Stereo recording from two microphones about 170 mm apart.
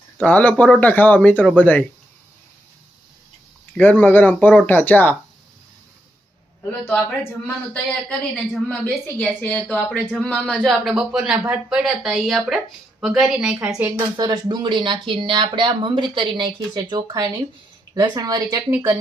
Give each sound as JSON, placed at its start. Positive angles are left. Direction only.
{"t": 0.2, "sound": "speech", "side_deg": 10}
{"t": 3.8, "sound": "speech", "side_deg": 10}
{"t": 6.7, "sound": "speech", "side_deg": 10}
{"t": 14.2, "sound": "speech", "side_deg": -25}